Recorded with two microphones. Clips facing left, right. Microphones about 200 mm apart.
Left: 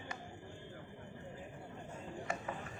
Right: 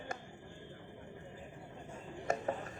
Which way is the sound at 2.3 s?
45° right (ahead or behind).